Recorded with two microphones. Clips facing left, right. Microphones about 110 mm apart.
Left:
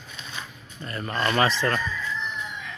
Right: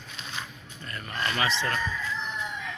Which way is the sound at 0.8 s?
35° left (ahead or behind).